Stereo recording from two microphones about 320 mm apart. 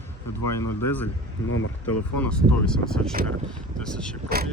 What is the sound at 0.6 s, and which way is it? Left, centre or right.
Speech, left.